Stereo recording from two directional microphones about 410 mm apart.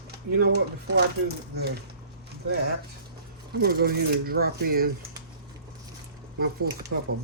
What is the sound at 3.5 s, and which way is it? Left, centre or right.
Speech, right.